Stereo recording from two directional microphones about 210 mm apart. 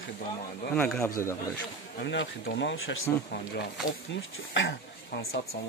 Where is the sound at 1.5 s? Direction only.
60° left (ahead or behind).